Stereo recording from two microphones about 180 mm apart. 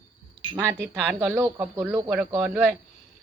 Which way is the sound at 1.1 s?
15° right (ahead or behind).